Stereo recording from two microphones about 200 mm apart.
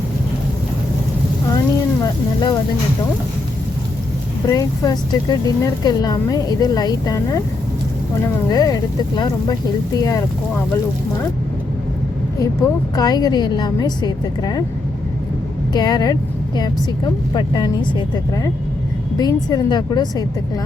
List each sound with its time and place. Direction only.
2.0 s a woman's voice: 20° left (ahead or behind)
4.4 s speech: 15° left (ahead or behind)
8.4 s a woman's voice: 20° left (ahead or behind)
12.4 s a woman's voice: 20° left (ahead or behind)
15.7 s a woman's voice: 20° left (ahead or behind)
19.2 s a woman's voice: 20° left (ahead or behind)